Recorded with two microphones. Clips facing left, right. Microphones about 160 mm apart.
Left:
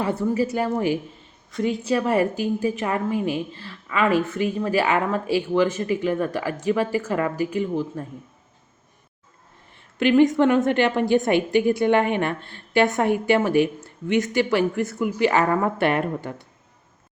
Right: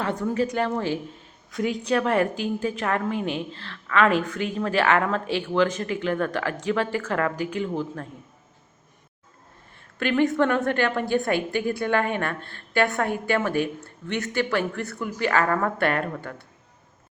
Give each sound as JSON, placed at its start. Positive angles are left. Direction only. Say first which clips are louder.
{"t": 0.0, "sound": "a woman's voice", "louder": "left 2 dB", "side_deg": 10}
{"t": 1.5, "sound": "a woman's voice", "louder": "left 2 dB", "side_deg": 0}
{"t": 10.0, "sound": "a woman's voice", "louder": "left 5 dB", "side_deg": 15}